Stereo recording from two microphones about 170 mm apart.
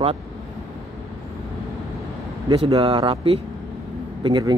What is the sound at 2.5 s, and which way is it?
Speech, 30° right (ahead or behind).